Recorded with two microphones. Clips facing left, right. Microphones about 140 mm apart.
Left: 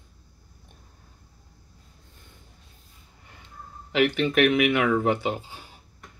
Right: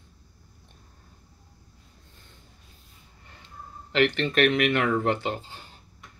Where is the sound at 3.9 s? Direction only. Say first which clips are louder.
Left 1 dB; 10° left (ahead or behind).